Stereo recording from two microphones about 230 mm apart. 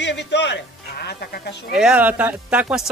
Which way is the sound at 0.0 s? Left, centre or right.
Left.